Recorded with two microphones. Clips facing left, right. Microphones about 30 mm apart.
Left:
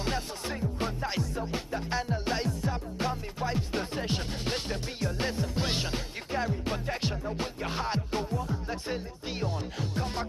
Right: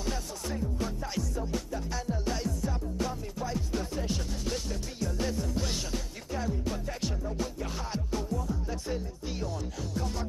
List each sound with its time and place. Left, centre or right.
0.0 s music: left